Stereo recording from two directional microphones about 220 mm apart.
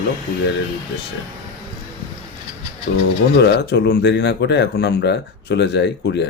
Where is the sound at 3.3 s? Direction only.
50° left (ahead or behind).